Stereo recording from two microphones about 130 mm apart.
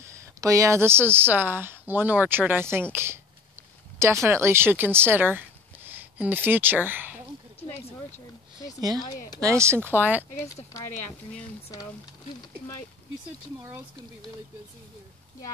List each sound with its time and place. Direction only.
0.0 s speech: 25° right (ahead or behind)
9.4 s speech: 20° right (ahead or behind)
10.3 s speech: 25° left (ahead or behind)